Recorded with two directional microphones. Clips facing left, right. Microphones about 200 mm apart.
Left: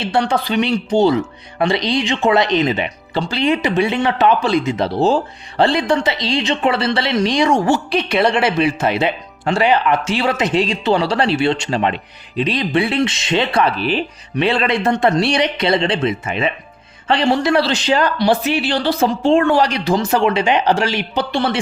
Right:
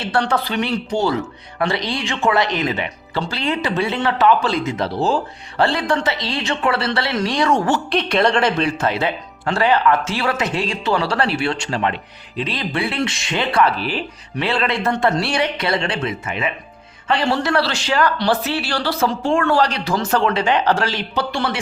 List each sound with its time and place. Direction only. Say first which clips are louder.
0.0 s speech: left 2 dB; 15° left (ahead or behind)